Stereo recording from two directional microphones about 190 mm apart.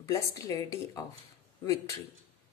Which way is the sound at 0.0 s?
15° left (ahead or behind).